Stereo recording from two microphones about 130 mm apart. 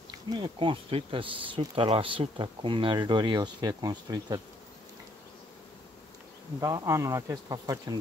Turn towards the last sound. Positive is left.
turn(degrees=-30)  # may be behind; listen again after turning